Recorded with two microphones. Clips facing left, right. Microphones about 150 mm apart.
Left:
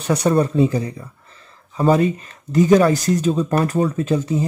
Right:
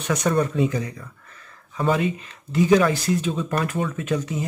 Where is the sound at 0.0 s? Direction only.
35° left (ahead or behind).